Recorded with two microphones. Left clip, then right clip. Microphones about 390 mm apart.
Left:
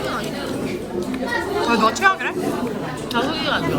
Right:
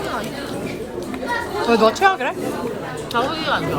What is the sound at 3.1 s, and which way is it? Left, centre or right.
Speech, right.